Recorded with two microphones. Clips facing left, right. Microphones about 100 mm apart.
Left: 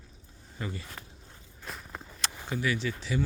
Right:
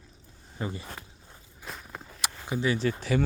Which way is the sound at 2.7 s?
45° right (ahead or behind).